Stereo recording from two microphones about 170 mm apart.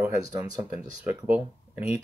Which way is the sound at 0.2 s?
20° right (ahead or behind).